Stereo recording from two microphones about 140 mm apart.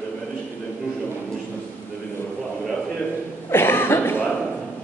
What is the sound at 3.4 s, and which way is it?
Cough, 15° left (ahead or behind).